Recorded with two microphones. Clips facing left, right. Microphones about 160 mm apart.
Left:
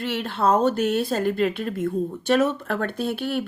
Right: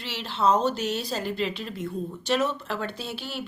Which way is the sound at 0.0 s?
50° left (ahead or behind).